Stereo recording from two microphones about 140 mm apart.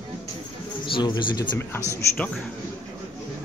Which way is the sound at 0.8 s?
35° left (ahead or behind).